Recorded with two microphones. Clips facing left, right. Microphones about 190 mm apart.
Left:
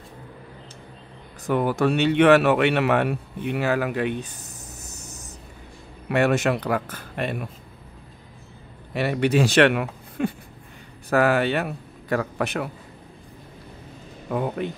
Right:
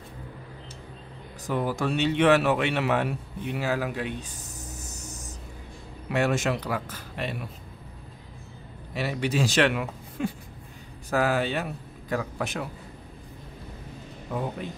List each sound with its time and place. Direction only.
1.4 s speech: 60° left (ahead or behind)
6.0 s speech: 60° left (ahead or behind)
8.9 s a man's voice: 60° left (ahead or behind)
14.3 s speech: 65° left (ahead or behind)